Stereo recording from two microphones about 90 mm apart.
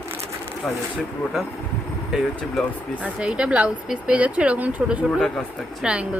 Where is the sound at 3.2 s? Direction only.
15° right (ahead or behind).